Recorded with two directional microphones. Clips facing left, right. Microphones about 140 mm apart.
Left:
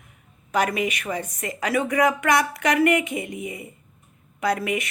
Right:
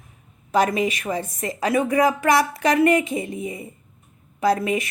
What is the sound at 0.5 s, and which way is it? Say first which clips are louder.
A woman's voice: right 3 dB; 25° right (ahead or behind).